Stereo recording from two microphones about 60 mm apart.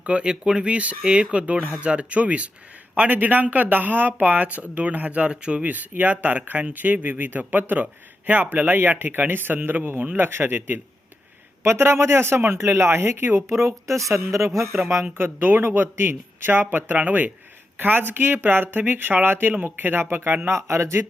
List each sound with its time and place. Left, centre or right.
0.0 s speech: centre
5.7 s speech: right
11.6 s speech: right
13.5 s speech: right
15.2 s speech: right
20.6 s speech: right